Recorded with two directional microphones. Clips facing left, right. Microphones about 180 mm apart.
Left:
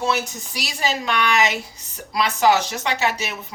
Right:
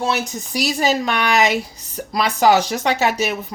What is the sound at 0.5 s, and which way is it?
Speech, 45° right (ahead or behind).